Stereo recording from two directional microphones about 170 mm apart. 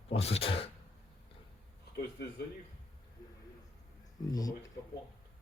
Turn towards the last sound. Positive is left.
turn(degrees=20)  # may be behind; listen again after turning